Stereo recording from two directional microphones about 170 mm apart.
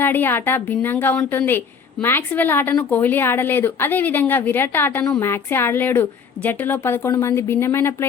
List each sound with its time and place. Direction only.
0.0 s a woman's voice: 10° left (ahead or behind)